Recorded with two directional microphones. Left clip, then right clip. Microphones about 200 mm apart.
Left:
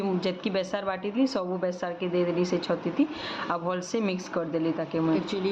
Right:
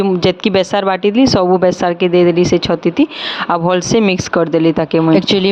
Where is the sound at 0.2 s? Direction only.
50° right (ahead or behind).